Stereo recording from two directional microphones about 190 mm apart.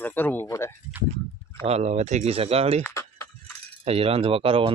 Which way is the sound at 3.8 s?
30° right (ahead or behind).